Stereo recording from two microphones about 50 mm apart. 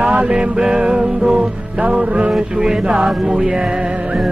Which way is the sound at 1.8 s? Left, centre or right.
Right.